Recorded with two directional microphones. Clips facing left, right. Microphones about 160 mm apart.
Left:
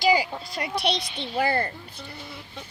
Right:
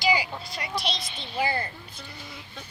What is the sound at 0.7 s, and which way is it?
Speech, 65° left (ahead or behind).